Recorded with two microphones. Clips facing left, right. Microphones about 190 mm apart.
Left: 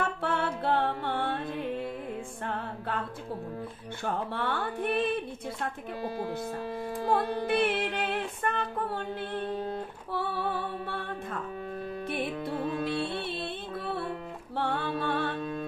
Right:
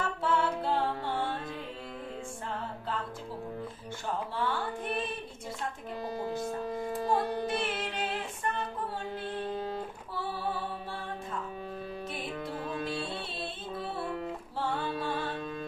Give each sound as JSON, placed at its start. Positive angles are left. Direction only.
{"t": 0.0, "sound": "music", "side_deg": 60}
{"t": 2.4, "sound": "music", "side_deg": 65}
{"t": 4.0, "sound": "speech", "side_deg": 60}
{"t": 7.1, "sound": "female singing", "side_deg": 60}
{"t": 10.1, "sound": "music", "side_deg": 60}
{"t": 12.1, "sound": "music", "side_deg": 60}
{"t": 14.6, "sound": "music", "side_deg": 60}